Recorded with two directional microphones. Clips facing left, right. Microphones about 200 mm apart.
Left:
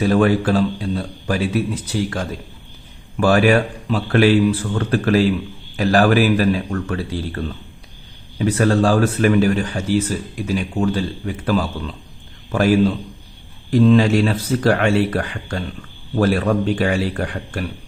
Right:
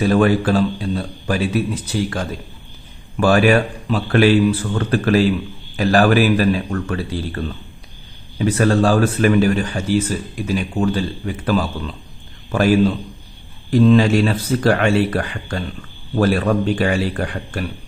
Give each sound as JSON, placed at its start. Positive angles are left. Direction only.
{"t": 0.0, "sound": "speech", "side_deg": 25}